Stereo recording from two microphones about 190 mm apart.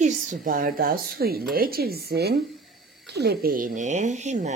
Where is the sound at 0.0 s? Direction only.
40° right (ahead or behind).